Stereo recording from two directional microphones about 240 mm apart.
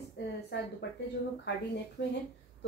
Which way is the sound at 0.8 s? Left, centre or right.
Left.